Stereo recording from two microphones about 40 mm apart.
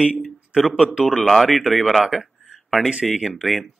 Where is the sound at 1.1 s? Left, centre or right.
Centre.